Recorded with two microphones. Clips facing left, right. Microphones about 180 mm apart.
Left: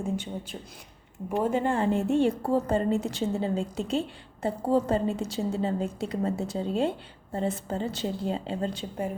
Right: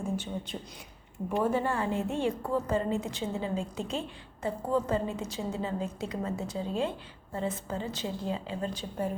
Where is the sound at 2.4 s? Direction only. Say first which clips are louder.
Left 4 dB; 35° left (ahead or behind).